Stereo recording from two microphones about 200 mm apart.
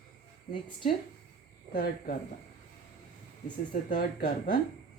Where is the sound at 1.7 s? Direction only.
45° left (ahead or behind).